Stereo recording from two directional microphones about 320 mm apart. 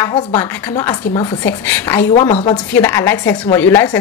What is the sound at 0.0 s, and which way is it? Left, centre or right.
A woman's voice, centre.